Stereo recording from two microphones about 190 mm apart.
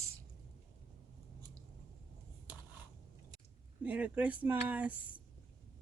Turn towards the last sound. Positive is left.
turn(degrees=-10)  # may be behind; listen again after turning